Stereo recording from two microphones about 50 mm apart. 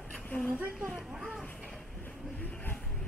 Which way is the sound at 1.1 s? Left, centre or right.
Centre.